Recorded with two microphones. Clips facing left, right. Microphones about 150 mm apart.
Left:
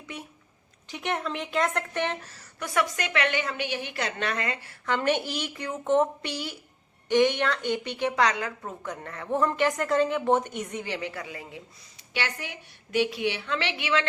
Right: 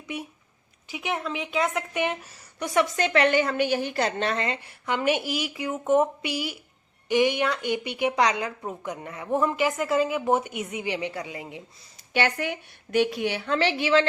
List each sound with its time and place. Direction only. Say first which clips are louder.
0.9 s a woman's voice: even; 5° right (ahead or behind); by 11.6 s 20° right (ahead or behind)
12.1 s a woman's voice: right 8 dB; 55° right (ahead or behind); by 14.1 s 35° right (ahead or behind)